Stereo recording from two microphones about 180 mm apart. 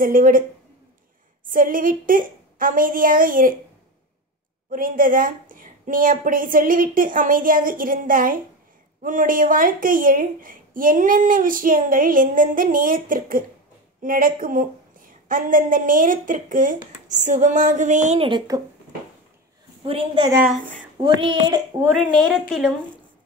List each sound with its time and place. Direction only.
0.0 s a woman's voice: 50° right (ahead or behind)
1.5 s a woman's voice: 50° right (ahead or behind)
4.6 s a woman's voice: 50° right (ahead or behind); by 18.6 s 30° right (ahead or behind)
19.8 s a woman's voice: 30° right (ahead or behind)
21.9 s a woman's voice: centre (ahead or behind)